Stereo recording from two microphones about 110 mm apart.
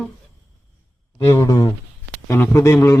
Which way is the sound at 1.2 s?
20° left (ahead or behind).